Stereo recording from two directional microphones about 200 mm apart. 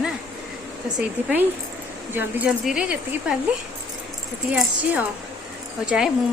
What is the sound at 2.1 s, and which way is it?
Speech, 5° right (ahead or behind).